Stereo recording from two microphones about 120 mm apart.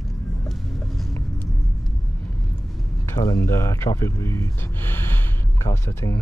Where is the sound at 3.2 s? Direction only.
25° left (ahead or behind).